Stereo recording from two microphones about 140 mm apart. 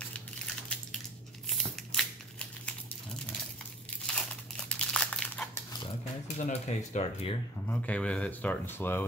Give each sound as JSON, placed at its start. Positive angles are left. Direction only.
{"t": 1.9, "sound": "a sound", "side_deg": 5}
{"t": 4.1, "sound": "crumpling", "side_deg": 5}
{"t": 6.2, "sound": "speech", "side_deg": 55}
{"t": 7.6, "sound": "speech", "side_deg": 10}